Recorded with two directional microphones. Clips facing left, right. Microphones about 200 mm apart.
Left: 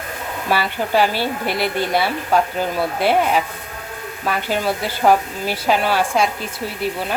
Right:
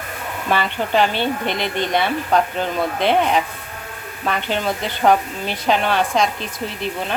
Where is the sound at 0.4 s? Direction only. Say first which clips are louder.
Even; 5° left (ahead or behind).